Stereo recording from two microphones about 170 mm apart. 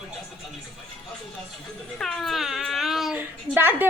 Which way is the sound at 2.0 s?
5° left (ahead or behind).